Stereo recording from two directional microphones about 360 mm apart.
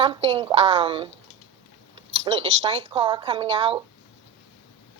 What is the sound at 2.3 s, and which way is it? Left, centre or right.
A woman's voice, centre.